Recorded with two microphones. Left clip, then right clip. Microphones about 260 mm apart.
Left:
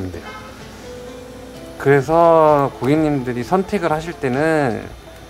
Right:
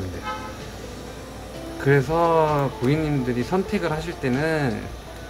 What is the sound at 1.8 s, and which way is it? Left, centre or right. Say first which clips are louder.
Speech: left 7 dB; centre.